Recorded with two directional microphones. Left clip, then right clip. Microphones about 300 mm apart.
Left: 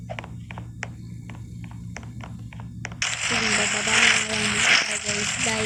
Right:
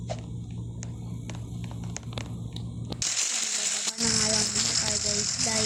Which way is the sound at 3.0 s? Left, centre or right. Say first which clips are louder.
Left 6 dB; centre.